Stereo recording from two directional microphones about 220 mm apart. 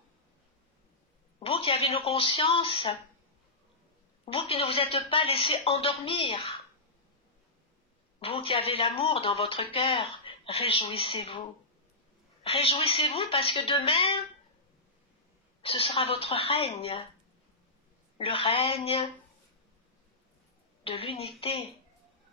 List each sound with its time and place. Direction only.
1.4 s a woman's voice: 25° left (ahead or behind)
4.3 s a woman's voice: 25° left (ahead or behind)
8.2 s a woman's voice: 25° left (ahead or behind)
12.4 s a woman's voice: 25° left (ahead or behind)
15.6 s a woman's voice: 25° left (ahead or behind)
18.1 s a woman's voice: 25° left (ahead or behind)
20.8 s a woman's voice: 25° left (ahead or behind)